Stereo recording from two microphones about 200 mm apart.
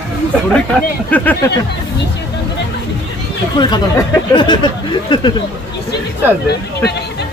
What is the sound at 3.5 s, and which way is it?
Speech, 20° left (ahead or behind).